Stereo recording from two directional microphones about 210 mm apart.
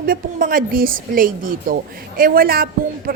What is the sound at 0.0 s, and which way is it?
Speech, 40° right (ahead or behind).